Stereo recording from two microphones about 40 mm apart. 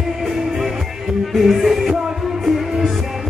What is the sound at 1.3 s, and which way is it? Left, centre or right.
Music, centre.